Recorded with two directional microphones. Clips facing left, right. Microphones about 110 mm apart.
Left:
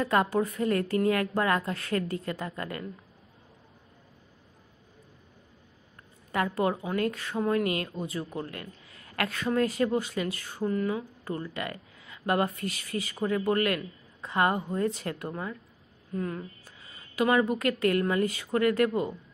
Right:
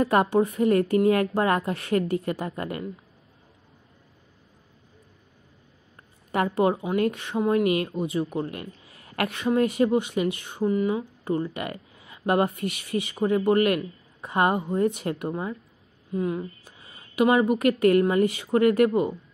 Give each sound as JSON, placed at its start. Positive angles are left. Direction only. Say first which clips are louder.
{"t": 0.0, "sound": "a woman's voice", "louder": "right 5 dB", "side_deg": -25}
{"t": 6.3, "sound": "a woman's voice", "louder": "right 5 dB", "side_deg": -25}